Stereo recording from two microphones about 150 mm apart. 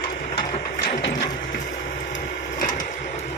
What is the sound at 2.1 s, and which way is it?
Wood, 60° left (ahead or behind).